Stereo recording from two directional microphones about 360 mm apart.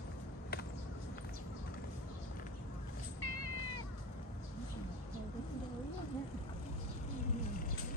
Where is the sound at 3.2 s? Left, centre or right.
Left.